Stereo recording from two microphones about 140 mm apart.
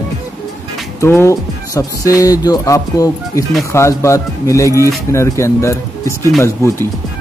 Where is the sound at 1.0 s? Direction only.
20° left (ahead or behind).